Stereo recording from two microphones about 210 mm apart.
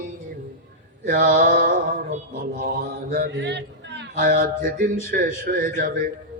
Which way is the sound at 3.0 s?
50° right (ahead or behind).